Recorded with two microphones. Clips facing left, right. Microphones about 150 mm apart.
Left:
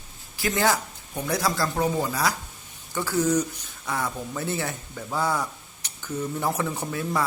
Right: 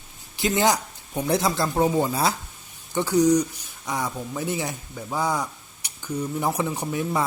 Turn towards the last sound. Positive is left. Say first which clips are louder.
# right 2 dB
turn(degrees=-20)  # may be behind; listen again after turning